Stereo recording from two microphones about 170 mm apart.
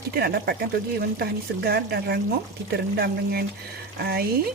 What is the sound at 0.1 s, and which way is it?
Speech, 65° right (ahead or behind).